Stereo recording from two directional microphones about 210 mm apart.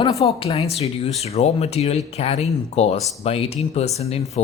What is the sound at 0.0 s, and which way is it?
Speech, 25° left (ahead or behind).